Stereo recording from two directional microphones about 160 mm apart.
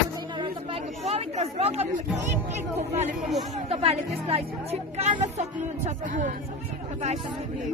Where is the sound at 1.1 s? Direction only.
40° right (ahead or behind).